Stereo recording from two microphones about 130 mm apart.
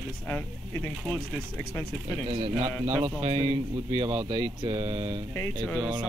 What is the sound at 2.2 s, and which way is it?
A man's voice, 50° right (ahead or behind).